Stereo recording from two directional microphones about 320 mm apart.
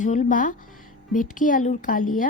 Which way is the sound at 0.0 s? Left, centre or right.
Left.